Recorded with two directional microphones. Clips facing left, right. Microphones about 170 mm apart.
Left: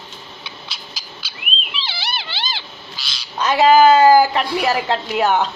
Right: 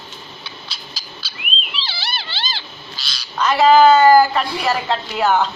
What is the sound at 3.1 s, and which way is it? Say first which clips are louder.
Speech: even; 20° left (ahead or behind).